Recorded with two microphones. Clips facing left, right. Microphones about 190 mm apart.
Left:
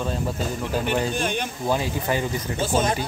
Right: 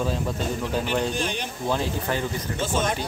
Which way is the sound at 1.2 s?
55° left (ahead or behind).